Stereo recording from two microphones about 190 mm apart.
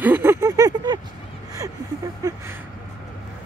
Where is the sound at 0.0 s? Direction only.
10° right (ahead or behind).